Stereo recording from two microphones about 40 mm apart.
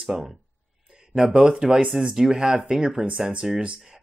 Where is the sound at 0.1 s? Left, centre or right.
Centre.